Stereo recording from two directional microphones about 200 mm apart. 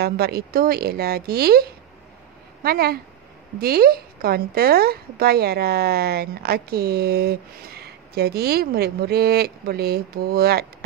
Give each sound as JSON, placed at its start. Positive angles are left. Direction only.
{"t": 0.0, "sound": "speech", "side_deg": -50}